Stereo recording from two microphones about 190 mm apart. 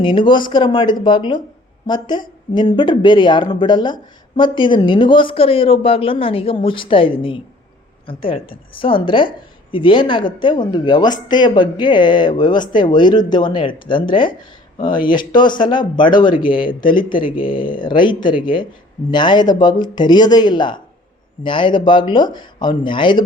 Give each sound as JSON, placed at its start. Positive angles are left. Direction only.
{"t": 0.0, "sound": "speech", "side_deg": 25}